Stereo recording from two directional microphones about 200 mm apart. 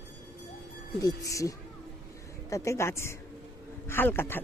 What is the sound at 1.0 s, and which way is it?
A woman's voice, 15° left (ahead or behind).